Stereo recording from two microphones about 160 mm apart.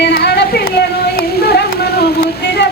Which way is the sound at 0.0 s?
85° left.